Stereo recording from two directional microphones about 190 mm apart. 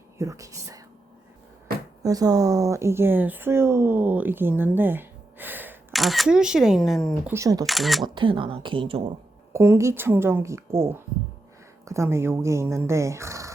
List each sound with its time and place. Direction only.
0.2 s speech: 15° right (ahead or behind)
2.0 s speech: 20° right (ahead or behind); by 7.3 s centre (ahead or behind)
7.3 s speech: 20° right (ahead or behind)
7.7 s speech: centre (ahead or behind)
8.0 s speech: 25° right (ahead or behind)
9.5 s speech: 15° right (ahead or behind)